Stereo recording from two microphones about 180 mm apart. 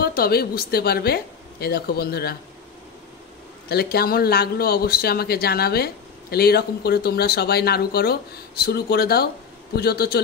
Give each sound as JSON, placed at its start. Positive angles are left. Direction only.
{"t": 0.0, "sound": "speech", "side_deg": 55}
{"t": 3.6, "sound": "speech", "side_deg": 60}